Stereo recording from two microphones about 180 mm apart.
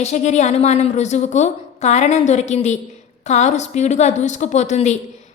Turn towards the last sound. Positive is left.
turn(degrees=40)  # may be behind; listen again after turning